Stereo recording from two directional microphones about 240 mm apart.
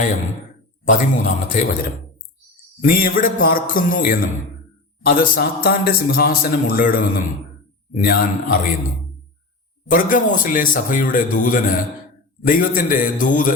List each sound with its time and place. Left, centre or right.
0.9 s speech: left
2.8 s speech: left
9.9 s speech: left